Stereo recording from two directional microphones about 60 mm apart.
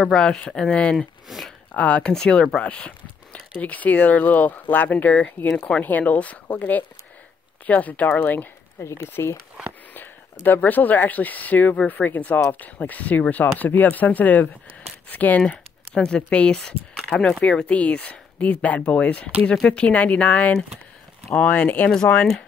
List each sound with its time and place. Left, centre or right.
0.0 s speech: centre
0.9 s speech: centre
1.7 s speech: left
8.8 s speech: left
9.9 s speech: left